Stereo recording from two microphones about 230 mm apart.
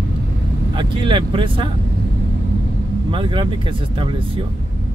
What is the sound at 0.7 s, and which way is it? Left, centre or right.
Speech, right.